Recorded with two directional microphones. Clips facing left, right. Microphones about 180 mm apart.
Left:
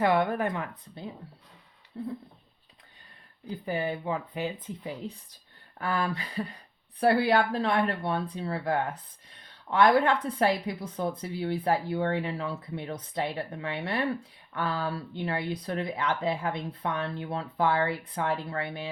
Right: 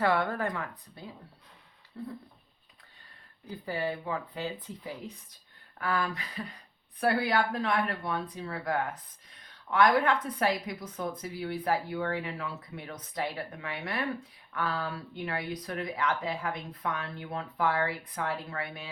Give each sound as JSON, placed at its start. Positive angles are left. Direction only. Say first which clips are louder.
{"t": 0.0, "sound": "a woman's voice", "louder": "left 3 dB", "side_deg": 20}
{"t": 3.5, "sound": "a woman's voice", "louder": "left 2 dB", "side_deg": 20}